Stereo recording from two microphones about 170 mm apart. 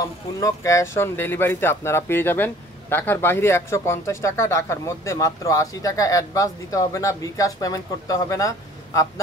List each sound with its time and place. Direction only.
0.4 s speech: 20° left (ahead or behind)